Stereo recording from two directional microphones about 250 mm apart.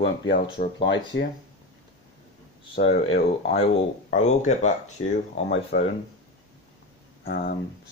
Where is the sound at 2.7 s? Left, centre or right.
Left.